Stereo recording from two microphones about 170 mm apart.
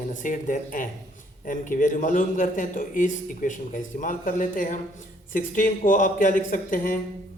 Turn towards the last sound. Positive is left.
turn(degrees=55)  # may be behind; listen again after turning